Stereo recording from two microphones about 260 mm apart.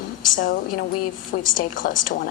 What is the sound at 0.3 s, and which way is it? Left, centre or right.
A woman's voice, left.